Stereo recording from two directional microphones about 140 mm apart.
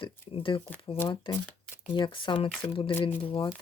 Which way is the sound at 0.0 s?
40° left (ahead or behind).